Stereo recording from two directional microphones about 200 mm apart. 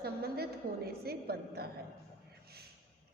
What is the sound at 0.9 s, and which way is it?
Speech, 50° right (ahead or behind).